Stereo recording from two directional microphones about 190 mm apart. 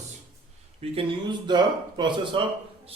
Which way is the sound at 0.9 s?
25° right (ahead or behind).